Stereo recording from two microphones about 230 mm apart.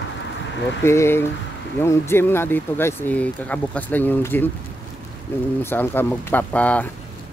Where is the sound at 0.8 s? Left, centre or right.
Centre.